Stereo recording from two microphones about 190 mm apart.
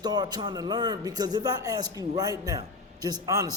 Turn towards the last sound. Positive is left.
turn(degrees=-20)  # may be behind; listen again after turning